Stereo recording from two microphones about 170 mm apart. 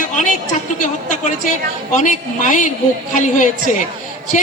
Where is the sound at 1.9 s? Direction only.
50° left (ahead or behind).